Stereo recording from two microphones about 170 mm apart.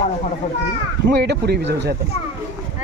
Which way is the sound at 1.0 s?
75° right (ahead or behind).